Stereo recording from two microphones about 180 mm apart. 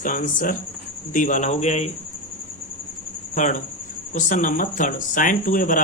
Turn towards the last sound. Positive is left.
turn(degrees=50)  # may be behind; listen again after turning